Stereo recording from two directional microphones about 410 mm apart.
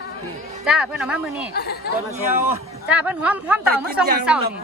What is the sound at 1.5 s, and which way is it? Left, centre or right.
Speech, left.